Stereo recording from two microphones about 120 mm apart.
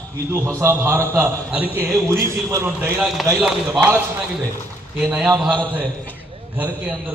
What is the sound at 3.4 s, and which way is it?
Speech, 10° right (ahead or behind).